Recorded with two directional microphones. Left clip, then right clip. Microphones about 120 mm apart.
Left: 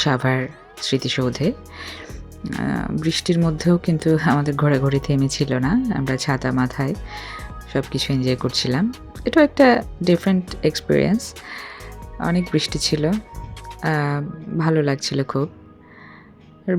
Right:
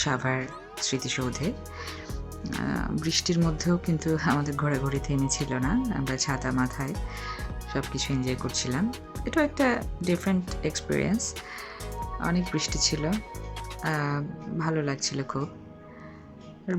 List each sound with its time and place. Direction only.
0.0 s speech: 40° left (ahead or behind)
5.5 s speech: 30° left (ahead or behind)
7.1 s music: 40° left (ahead or behind)
7.9 s speech: 40° left (ahead or behind)